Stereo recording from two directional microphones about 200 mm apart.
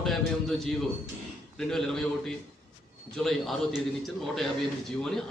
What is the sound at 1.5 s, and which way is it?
A man's voice, centre (ahead or behind).